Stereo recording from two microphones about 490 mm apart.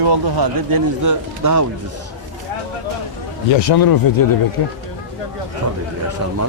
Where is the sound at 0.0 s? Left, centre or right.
Right.